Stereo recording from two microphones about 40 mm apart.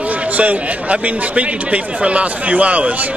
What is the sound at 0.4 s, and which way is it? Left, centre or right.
A man's voice, right.